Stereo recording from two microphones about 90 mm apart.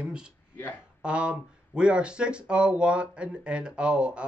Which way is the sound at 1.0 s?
10° right (ahead or behind).